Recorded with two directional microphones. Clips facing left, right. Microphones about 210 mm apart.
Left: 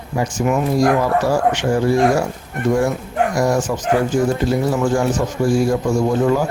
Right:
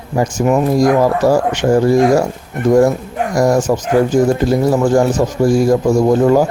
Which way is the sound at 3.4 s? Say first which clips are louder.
Right 9 dB; 40° right (ahead or behind).